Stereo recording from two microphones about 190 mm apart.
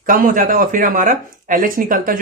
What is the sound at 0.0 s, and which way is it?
Speech, 45° right (ahead or behind).